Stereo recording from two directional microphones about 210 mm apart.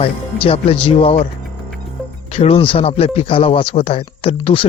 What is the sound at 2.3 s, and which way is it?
Speech, 30° left (ahead or behind).